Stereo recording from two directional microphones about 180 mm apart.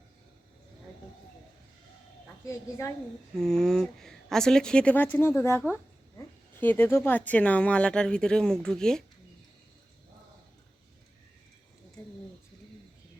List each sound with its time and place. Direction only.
2.5 s speech: 15° left (ahead or behind)
3.3 s speech: 5° left (ahead or behind)